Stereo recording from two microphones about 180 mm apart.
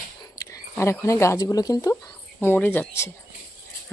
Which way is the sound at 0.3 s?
20° left (ahead or behind).